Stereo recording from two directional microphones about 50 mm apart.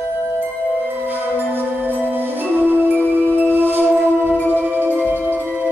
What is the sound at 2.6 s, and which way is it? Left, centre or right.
Music, right.